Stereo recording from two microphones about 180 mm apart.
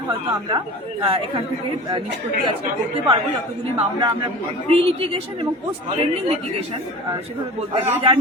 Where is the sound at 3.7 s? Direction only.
30° right (ahead or behind).